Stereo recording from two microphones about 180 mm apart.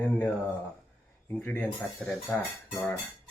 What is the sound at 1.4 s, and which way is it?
Speech, 10° left (ahead or behind).